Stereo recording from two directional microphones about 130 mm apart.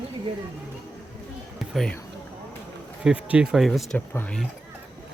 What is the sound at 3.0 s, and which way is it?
Speech, 10° right (ahead or behind).